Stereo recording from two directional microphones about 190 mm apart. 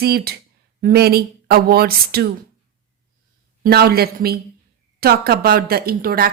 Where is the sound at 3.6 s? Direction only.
55° right (ahead or behind).